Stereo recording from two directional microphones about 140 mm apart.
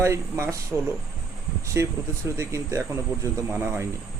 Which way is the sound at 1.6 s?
20° right (ahead or behind).